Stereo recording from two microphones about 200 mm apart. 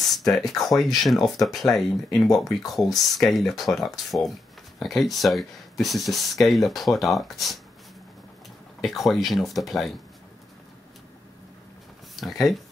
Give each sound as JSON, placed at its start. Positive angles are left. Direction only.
{"t": 0.2, "sound": "speech", "side_deg": 0}
{"t": 8.8, "sound": "speech", "side_deg": 0}
{"t": 12.2, "sound": "speech", "side_deg": 0}